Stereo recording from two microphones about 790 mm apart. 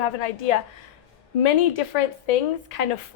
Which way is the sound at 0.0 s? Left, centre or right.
Left.